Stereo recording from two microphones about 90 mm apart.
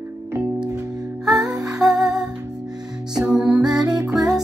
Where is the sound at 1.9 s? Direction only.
45° right (ahead or behind).